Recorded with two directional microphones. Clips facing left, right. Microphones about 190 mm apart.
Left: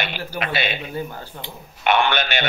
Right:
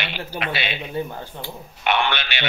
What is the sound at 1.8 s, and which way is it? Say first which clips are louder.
Speech: left 3 dB; 45° left (ahead or behind).